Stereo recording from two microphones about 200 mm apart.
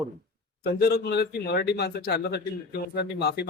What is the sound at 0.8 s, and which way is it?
A man's voice, 55° left (ahead or behind).